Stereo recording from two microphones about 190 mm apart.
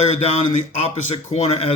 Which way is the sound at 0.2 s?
35° left (ahead or behind).